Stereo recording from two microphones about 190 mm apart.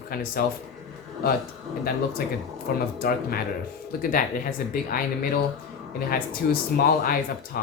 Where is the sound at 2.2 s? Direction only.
50° left (ahead or behind).